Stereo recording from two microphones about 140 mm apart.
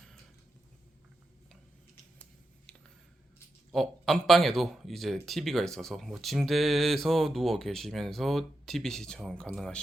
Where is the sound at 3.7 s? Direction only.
Centre (ahead or behind).